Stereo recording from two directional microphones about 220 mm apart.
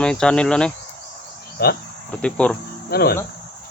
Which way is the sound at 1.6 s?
45° left (ahead or behind).